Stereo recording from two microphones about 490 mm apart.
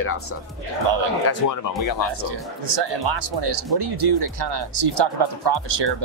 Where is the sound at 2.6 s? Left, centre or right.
Right.